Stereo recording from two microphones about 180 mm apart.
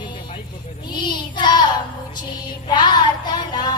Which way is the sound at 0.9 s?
25° left (ahead or behind).